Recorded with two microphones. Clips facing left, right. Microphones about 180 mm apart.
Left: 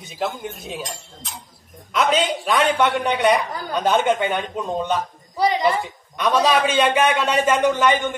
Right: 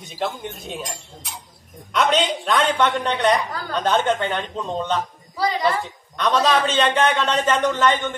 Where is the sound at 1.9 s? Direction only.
5° left (ahead or behind).